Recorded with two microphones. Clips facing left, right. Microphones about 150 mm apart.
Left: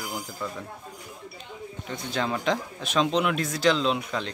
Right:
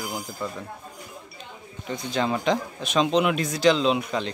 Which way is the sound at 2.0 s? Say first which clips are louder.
Right 3 dB; centre (ahead or behind).